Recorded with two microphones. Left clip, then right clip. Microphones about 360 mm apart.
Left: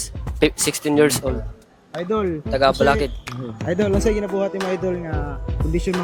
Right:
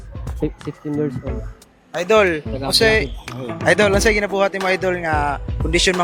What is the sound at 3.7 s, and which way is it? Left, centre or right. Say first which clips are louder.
Speech: right 3 dB; right.